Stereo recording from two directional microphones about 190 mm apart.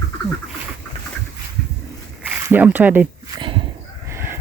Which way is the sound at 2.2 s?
10° right (ahead or behind).